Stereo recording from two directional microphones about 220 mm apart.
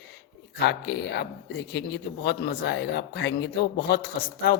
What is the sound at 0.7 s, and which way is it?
Speech, 50° left (ahead or behind).